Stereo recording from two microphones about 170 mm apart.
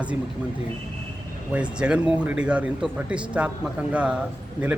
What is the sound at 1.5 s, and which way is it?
A man's voice, 5° right (ahead or behind).